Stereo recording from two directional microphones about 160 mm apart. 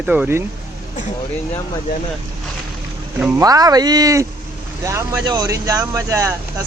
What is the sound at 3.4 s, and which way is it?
Speech, 20° right (ahead or behind).